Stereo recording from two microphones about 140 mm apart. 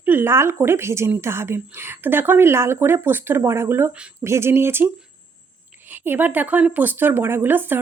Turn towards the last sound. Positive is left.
turn(degrees=-15)  # may be behind; listen again after turning